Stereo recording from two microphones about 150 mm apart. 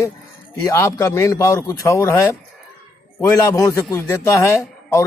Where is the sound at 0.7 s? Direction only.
20° left (ahead or behind).